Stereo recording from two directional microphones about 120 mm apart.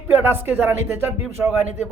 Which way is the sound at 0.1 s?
20° right (ahead or behind).